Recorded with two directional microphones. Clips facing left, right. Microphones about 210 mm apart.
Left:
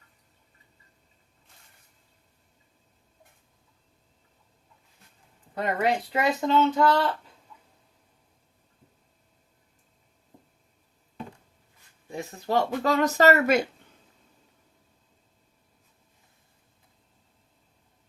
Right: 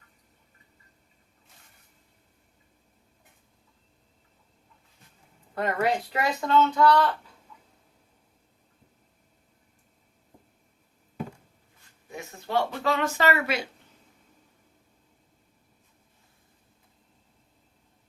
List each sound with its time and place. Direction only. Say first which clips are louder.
5.5 s speech: even; 20° left (ahead or behind)
12.1 s speech: left 2 dB; 40° left (ahead or behind)